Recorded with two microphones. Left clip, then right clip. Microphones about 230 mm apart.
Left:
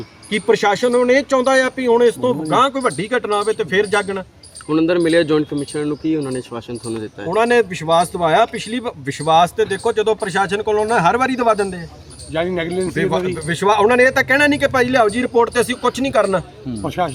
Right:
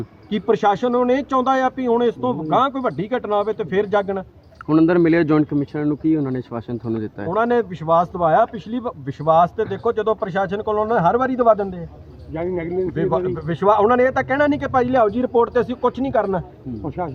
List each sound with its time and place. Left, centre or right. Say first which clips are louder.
0.3 s a man's voice: left 2 dB; centre
4.7 s speech: left 1 dB; right
7.3 s a man's voice: left 4 dB; centre
12.3 s speech: left 4 dB; left
13.0 s a man's voice: left 3 dB; centre